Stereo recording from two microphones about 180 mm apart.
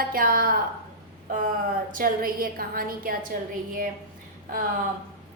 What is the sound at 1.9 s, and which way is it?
A woman's voice, 55° right (ahead or behind).